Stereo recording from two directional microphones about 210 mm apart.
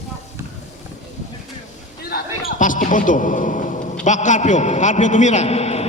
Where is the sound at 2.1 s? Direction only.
40° left (ahead or behind).